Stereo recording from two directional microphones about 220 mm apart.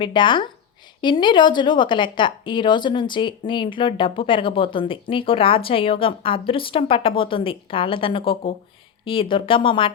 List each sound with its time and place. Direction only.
0.0 s speech: 20° left (ahead or behind)